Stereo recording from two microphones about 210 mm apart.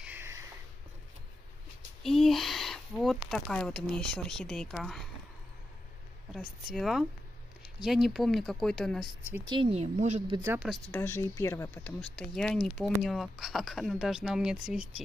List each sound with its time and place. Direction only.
0.0 s a sound: 10° right (ahead or behind)
2.0 s speech: centre (ahead or behind)
6.3 s speech: centre (ahead or behind)
9.5 s speech: 25° right (ahead or behind)
10.3 s speech: 10° right (ahead or behind)
10.9 s speech: 10° left (ahead or behind); by 14.9 s 5° right (ahead or behind)